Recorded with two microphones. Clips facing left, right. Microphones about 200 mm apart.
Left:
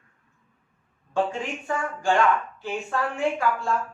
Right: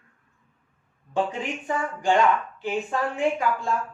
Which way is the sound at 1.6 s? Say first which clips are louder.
Right 1 dB; 20° right (ahead or behind).